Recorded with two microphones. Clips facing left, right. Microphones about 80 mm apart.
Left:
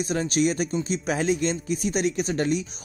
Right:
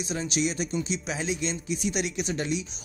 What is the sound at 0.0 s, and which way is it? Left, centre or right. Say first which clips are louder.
Speech: left 5 dB; left.